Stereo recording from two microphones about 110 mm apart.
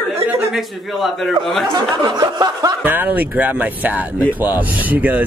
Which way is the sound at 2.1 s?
35° right (ahead or behind).